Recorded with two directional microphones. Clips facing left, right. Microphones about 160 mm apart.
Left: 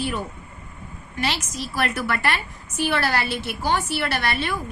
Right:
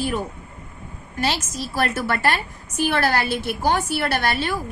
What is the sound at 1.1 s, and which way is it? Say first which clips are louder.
A woman's voice: right 2 dB; 40° right (ahead or behind).